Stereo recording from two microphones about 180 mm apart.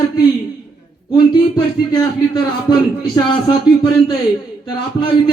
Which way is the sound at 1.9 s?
25° left (ahead or behind).